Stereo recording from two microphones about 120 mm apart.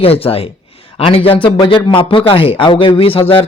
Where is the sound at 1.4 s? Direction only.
40° left (ahead or behind).